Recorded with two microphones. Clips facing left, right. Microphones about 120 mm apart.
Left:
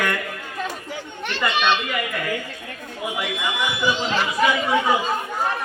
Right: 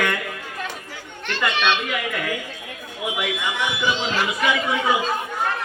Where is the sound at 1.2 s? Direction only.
10° left (ahead or behind).